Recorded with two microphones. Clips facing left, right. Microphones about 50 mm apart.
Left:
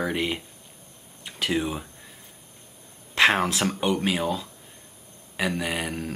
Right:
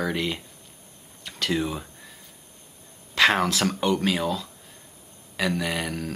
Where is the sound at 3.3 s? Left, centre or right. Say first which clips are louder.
Right 1 dB; centre.